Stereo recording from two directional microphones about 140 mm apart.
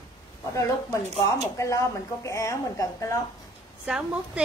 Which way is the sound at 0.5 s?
20° left (ahead or behind).